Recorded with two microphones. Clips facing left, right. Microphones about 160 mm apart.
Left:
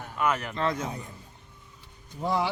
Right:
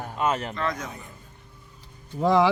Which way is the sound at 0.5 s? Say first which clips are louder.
Left 1 dB; 30° left (ahead or behind).